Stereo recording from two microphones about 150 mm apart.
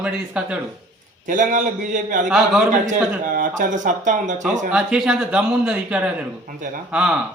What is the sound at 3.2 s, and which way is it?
A man's voice, 65° right (ahead or behind).